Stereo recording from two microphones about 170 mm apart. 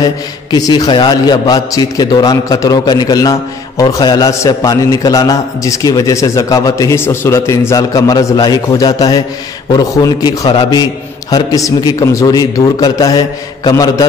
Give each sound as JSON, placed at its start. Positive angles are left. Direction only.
{"t": 0.0, "sound": "a man's voice", "side_deg": 25}